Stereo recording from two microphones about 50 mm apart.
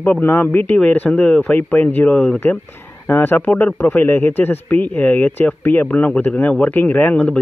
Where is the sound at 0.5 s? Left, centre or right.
Left.